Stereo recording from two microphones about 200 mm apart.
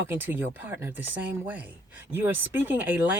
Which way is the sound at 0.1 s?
10° right (ahead or behind).